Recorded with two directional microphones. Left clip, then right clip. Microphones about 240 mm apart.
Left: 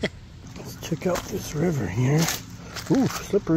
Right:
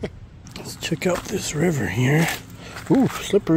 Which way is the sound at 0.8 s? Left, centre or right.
Right.